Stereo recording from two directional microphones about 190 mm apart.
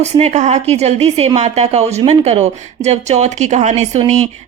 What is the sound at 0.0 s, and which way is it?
Speech, 35° right (ahead or behind).